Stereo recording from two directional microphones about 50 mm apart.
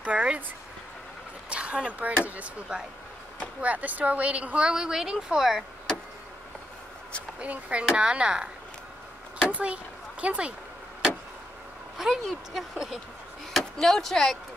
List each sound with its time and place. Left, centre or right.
0.0 s speech: right
1.5 s speech: right
3.6 s a woman's voice: right; by 5.6 s centre
7.3 s a woman's voice: right
9.5 s a woman's voice: right
12.0 s speech: centre